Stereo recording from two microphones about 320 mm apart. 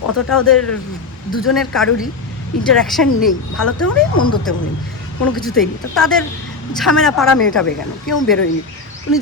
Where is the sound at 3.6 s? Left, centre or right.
Left.